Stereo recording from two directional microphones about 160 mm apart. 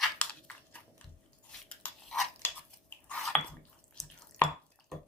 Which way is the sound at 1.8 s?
5° left (ahead or behind).